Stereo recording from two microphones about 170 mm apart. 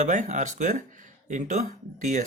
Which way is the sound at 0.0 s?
45° right (ahead or behind).